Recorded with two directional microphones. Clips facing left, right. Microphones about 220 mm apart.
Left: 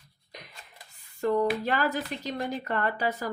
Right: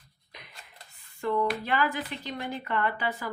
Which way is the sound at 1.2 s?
40° left (ahead or behind).